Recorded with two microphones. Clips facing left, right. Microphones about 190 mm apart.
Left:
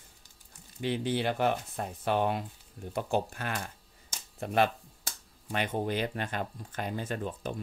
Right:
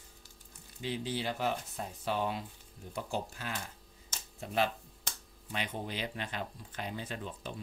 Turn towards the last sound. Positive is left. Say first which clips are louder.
# left 7 dB
turn(degrees=50)  # may be behind; listen again after turning